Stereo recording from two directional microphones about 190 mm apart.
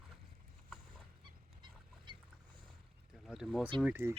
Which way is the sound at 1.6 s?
25° right (ahead or behind).